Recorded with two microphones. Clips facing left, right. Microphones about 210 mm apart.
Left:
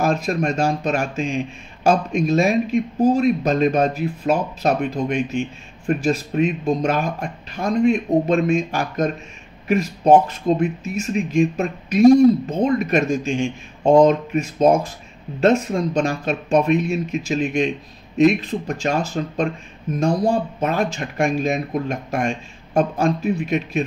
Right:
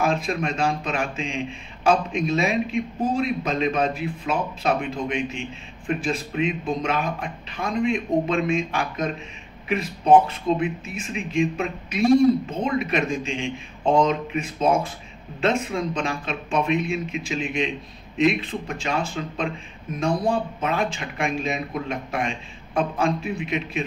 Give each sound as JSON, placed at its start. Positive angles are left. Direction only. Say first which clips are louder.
{"t": 0.0, "sound": "speech", "louder": "left 4 dB", "side_deg": 45}